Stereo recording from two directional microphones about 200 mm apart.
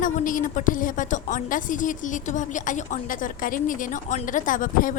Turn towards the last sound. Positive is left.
turn(degrees=40)  # may be behind; listen again after turning